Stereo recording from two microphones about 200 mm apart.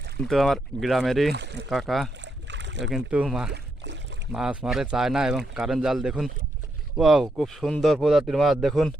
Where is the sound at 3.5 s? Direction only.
60° right (ahead or behind).